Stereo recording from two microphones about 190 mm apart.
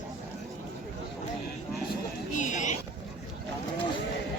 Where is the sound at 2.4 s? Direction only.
40° left (ahead or behind).